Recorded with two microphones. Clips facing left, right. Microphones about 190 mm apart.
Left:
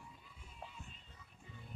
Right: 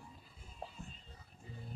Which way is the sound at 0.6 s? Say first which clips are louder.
Right 4 dB; 35° right (ahead or behind).